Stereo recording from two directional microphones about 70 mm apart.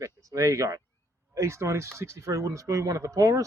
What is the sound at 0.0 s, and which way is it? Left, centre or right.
Speech, right.